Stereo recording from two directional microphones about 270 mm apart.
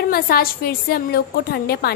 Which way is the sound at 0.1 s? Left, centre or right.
Left.